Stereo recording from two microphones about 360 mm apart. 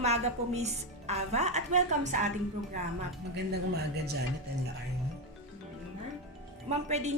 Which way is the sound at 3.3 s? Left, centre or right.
Right.